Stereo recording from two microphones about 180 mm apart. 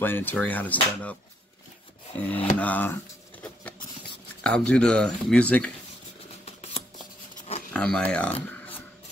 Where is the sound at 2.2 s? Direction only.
10° left (ahead or behind).